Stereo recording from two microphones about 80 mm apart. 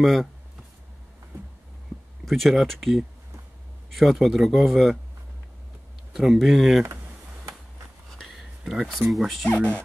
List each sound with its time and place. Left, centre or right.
0.0 s speech: centre
2.2 s speech: centre
6.1 s speech: centre
8.2 s a sound: centre
8.8 s speech: centre
9.5 s speech: left